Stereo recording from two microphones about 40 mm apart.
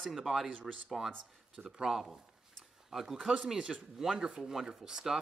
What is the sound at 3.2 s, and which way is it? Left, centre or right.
Speech, centre.